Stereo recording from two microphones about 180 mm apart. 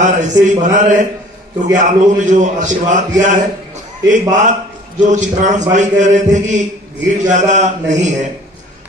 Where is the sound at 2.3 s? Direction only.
45° right (ahead or behind).